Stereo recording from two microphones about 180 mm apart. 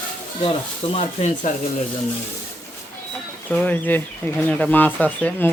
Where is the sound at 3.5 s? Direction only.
10° left (ahead or behind).